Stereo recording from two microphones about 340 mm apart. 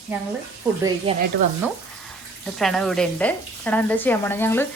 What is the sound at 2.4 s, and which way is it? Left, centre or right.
A woman's voice, centre.